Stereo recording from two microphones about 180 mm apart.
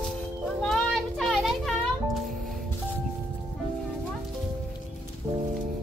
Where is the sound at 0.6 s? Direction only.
Centre (ahead or behind).